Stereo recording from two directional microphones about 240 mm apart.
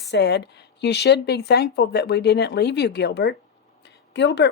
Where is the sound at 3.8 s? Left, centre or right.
Left.